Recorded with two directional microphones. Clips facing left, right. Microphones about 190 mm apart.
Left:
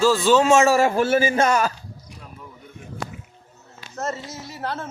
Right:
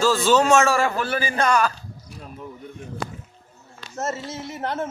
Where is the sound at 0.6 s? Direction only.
40° left (ahead or behind).